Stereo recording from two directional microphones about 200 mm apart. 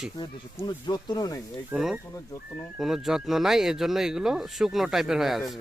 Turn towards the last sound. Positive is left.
turn(degrees=0)  # may be behind; listen again after turning